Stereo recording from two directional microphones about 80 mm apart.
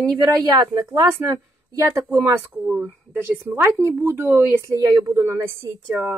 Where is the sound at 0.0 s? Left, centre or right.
Right.